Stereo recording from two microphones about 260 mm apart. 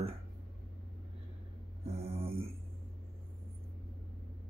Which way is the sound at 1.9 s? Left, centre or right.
Right.